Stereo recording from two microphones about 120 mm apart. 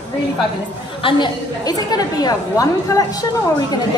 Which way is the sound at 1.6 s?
35° left (ahead or behind).